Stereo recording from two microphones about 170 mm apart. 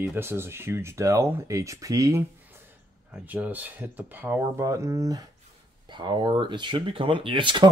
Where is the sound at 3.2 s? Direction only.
10° right (ahead or behind); by 7.7 s 30° right (ahead or behind).